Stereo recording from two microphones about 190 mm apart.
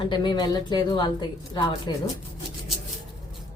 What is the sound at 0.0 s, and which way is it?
A woman's voice, 25° left (ahead or behind).